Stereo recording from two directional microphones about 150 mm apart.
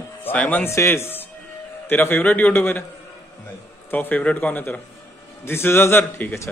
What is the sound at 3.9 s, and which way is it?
A man's voice, 10° left (ahead or behind).